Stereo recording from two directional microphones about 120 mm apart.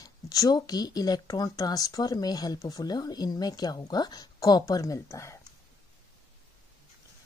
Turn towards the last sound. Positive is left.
turn(degrees=25)  # may be behind; listen again after turning